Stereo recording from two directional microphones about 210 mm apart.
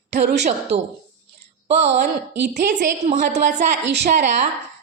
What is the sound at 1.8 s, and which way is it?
Speech, 50° right (ahead or behind).